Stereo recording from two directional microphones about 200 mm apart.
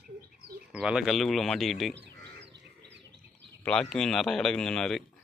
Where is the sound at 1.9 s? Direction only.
60° right (ahead or behind).